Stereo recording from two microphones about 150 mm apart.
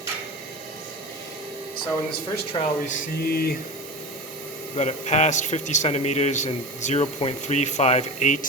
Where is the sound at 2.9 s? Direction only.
90° left.